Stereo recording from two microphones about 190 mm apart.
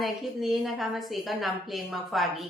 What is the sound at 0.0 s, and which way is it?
A woman's voice, centre (ahead or behind).